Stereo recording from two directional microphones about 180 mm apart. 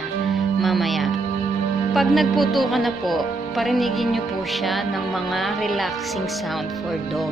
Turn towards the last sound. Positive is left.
turn(degrees=0)  # may be behind; listen again after turning